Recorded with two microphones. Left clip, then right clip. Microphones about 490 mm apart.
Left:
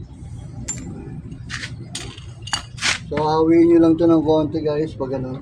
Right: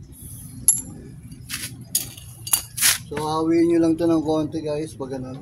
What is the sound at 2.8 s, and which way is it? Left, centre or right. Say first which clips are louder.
Speech: left 3 dB; right.